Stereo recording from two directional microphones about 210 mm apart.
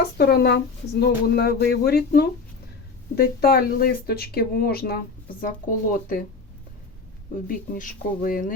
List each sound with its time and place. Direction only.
0.0 s speech: 50° left (ahead or behind)
7.4 s speech: 40° left (ahead or behind)